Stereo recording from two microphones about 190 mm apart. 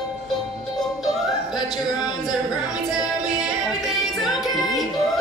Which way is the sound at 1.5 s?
20° left (ahead or behind).